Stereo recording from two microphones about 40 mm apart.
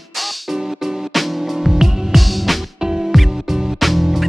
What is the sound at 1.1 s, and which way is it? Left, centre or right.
Music, centre.